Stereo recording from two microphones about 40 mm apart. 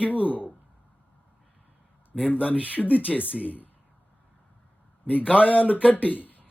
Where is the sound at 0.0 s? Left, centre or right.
Left.